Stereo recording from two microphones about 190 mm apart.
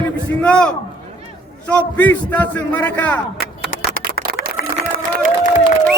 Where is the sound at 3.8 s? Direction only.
55° right (ahead or behind).